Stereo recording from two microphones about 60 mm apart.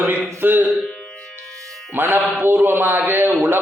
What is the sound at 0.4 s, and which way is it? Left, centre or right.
Speech, right.